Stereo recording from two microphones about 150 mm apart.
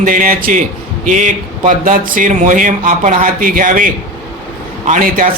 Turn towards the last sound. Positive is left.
turn(degrees=-65)  # may be behind; listen again after turning